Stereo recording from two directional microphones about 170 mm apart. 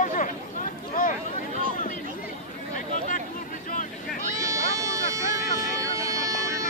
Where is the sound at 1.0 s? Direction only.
55° left (ahead or behind).